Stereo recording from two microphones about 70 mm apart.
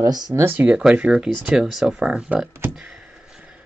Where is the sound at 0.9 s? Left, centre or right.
Centre.